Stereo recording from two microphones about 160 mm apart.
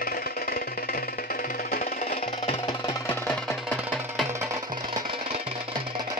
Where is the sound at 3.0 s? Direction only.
15° left (ahead or behind).